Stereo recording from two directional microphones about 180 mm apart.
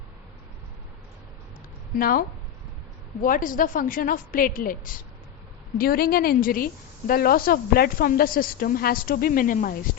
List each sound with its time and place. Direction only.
2.0 s a woman's voice: 50° left (ahead or behind)